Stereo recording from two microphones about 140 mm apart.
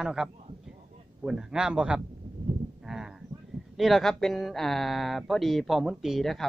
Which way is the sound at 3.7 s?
Centre (ahead or behind).